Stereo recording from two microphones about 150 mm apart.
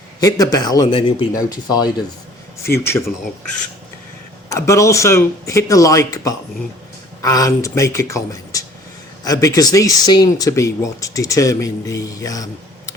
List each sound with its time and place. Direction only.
0.2 s speech: 25° left (ahead or behind)
4.4 s speech: 20° left (ahead or behind)